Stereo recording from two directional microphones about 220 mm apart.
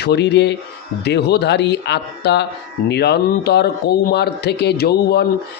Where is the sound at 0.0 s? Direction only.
50° left (ahead or behind).